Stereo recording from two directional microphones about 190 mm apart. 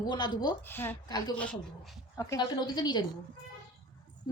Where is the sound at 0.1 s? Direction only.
20° left (ahead or behind).